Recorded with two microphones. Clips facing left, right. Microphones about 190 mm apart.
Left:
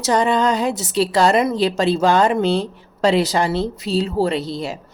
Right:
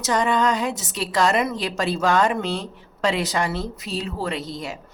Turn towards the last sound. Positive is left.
turn(degrees=30)  # may be behind; listen again after turning